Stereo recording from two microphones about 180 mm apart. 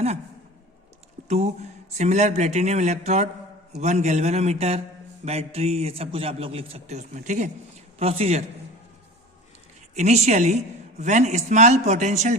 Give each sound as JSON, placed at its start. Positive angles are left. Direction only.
{"t": 1.3, "sound": "speech", "side_deg": -40}
{"t": 9.9, "sound": "speech", "side_deg": -40}